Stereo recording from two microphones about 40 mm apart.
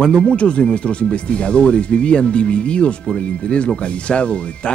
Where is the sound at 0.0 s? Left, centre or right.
Left.